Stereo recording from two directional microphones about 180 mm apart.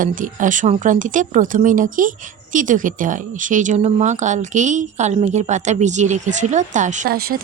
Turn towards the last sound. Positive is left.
turn(degrees=-55)  # may be behind; listen again after turning